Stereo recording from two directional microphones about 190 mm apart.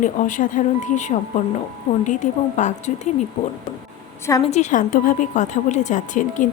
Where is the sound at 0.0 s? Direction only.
45° left (ahead or behind).